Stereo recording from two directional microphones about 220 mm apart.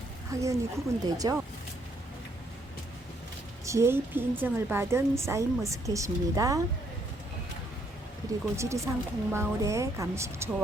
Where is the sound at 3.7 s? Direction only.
10° right (ahead or behind).